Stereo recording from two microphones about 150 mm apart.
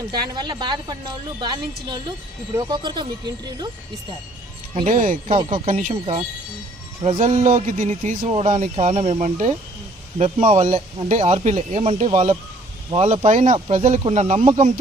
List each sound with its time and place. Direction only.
0.1 s a woman's voice: 30° right (ahead or behind)
4.9 s speech: 65° right (ahead or behind)
5.3 s speech: 40° right (ahead or behind)
5.6 s speech: 60° right (ahead or behind)
5.9 s a man's voice: 45° right (ahead or behind)